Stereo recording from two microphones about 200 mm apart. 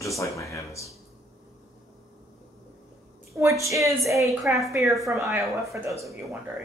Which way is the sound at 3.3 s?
15° right (ahead or behind).